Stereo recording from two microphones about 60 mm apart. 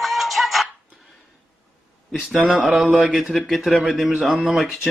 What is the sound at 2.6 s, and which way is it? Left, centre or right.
A man's voice, centre.